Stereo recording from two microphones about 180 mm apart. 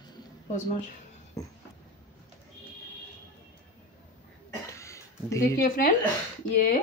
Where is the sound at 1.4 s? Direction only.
15° left (ahead or behind).